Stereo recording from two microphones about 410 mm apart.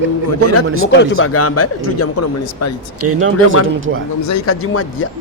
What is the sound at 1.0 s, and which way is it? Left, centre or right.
A man's voice, left.